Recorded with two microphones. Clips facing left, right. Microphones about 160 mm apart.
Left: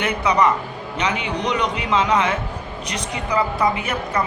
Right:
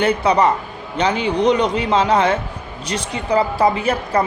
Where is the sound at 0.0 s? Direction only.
30° right (ahead or behind).